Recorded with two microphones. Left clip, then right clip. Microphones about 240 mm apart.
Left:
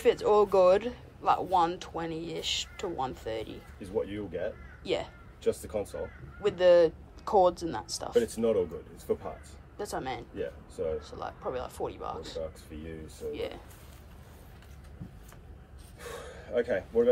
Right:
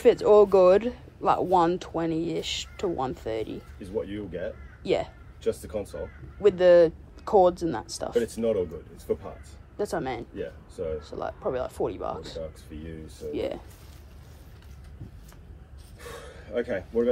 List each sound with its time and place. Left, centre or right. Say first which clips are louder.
0.0 s speech: right 6 dB; centre
9.8 s speech: right 6 dB; centre
16.0 s a sound: even; centre